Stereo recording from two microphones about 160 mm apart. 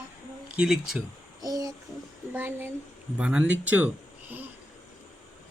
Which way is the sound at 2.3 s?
10° right (ahead or behind).